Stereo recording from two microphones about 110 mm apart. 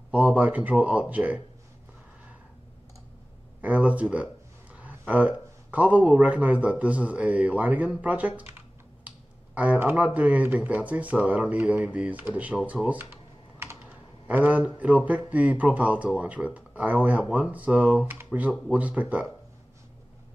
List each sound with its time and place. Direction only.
0.1 s speech: 10° right (ahead or behind)
3.6 s speech: 10° right (ahead or behind)
8.4 s computer keyboard: 15° right (ahead or behind)
9.5 s speech: 10° right (ahead or behind)
13.8 s a sound: 15° right (ahead or behind)
14.8 s speech: 15° right (ahead or behind)